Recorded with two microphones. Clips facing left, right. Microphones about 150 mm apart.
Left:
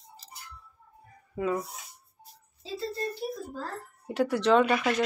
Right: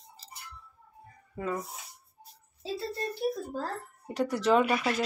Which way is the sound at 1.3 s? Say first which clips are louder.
Left 4 dB; 10° left (ahead or behind).